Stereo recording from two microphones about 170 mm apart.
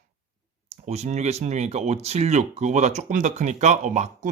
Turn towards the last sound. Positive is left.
turn(degrees=-45)  # may be behind; listen again after turning